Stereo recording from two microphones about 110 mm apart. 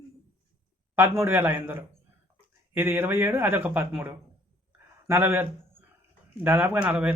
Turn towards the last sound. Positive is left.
turn(degrees=-10)  # may be behind; listen again after turning